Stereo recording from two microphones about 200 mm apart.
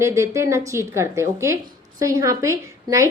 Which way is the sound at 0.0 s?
15° right (ahead or behind).